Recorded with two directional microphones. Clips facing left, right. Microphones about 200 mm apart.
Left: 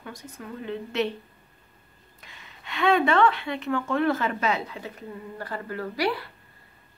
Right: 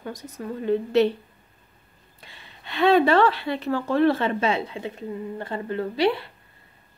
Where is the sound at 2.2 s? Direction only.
30° right (ahead or behind).